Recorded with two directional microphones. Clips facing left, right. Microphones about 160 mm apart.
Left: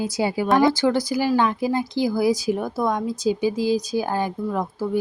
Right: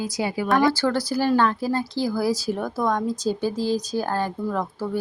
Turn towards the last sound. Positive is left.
turn(degrees=15)  # may be behind; listen again after turning